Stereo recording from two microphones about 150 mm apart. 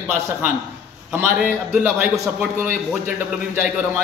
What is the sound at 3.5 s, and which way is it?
Speech, 10° right (ahead or behind).